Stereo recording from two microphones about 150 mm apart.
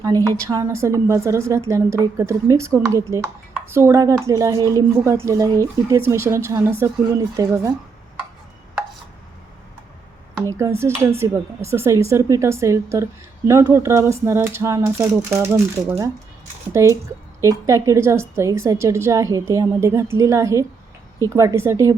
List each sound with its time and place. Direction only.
0.0 s a woman's voice: 25° right (ahead or behind)
10.4 s a woman's voice: 20° right (ahead or behind)